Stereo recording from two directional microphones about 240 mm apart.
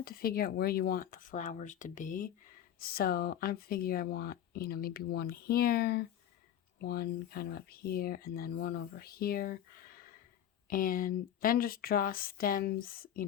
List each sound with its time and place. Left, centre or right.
0.0 s speech: left
10.7 s speech: left